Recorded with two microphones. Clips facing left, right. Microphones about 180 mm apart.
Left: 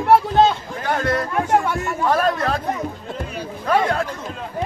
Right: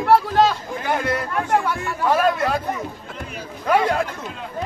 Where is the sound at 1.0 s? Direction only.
10° right (ahead or behind).